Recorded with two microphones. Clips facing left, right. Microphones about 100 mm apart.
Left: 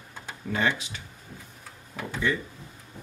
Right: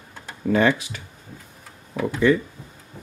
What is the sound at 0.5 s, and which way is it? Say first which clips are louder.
Speech: right 8 dB; 70° right (ahead or behind).